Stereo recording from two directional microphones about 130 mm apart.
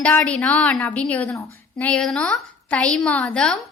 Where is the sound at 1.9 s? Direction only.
5° left (ahead or behind).